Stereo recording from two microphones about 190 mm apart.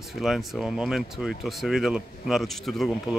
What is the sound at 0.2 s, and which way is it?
Speech, centre (ahead or behind).